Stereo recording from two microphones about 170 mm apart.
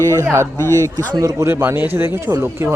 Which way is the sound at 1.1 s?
20° right (ahead or behind).